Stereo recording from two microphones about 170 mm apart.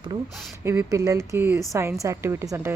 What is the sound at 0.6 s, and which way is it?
Speech, 15° right (ahead or behind).